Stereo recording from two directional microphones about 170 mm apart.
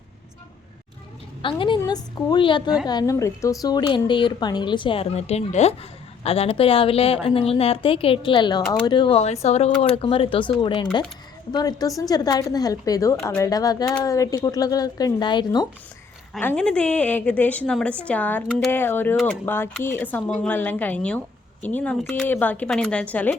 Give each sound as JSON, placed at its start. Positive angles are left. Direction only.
{"t": 1.4, "sound": "a woman's voice", "side_deg": 30}
{"t": 16.4, "sound": "speech", "side_deg": 10}